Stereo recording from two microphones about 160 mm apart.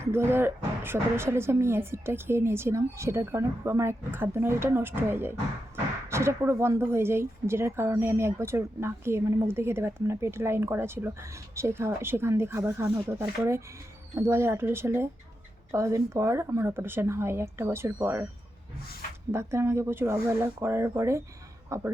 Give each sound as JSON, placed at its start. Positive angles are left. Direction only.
{"t": 0.0, "sound": "speech", "side_deg": -15}
{"t": 19.3, "sound": "speech", "side_deg": -15}